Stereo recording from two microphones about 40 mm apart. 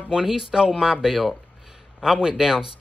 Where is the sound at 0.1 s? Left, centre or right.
Centre.